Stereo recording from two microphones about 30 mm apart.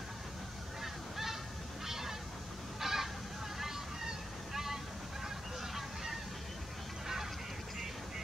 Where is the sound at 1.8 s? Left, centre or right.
Centre.